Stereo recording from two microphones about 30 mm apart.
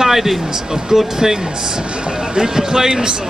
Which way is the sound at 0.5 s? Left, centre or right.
Right.